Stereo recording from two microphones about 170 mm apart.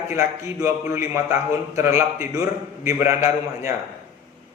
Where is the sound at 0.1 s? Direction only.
15° right (ahead or behind).